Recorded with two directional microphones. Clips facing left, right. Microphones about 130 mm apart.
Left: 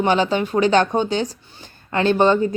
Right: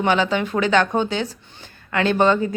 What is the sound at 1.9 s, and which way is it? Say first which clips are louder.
Speech: left 2 dB; 25° left (ahead or behind).